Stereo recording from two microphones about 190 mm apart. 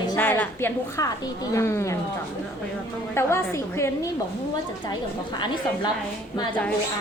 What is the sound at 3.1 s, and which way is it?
Speech, 15° left (ahead or behind).